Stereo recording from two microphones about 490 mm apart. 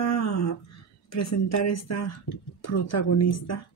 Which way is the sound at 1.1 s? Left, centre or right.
Left.